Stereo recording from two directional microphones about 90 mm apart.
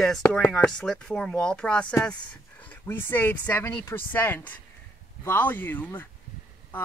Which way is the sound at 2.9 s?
25° left (ahead or behind).